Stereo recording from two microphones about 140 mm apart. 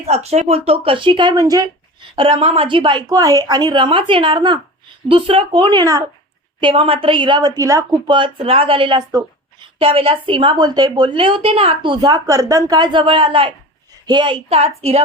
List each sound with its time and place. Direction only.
0.0 s a woman's voice: 50° right (ahead or behind); by 2.0 s 25° right (ahead or behind)
2.1 s a woman's voice: 40° right (ahead or behind)
6.6 s a woman's voice: 40° right (ahead or behind)
14.5 s a woman's voice: 45° right (ahead or behind)